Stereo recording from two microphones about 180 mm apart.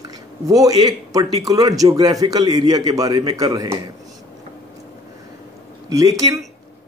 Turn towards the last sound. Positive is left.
turn(degrees=-20)  # may be behind; listen again after turning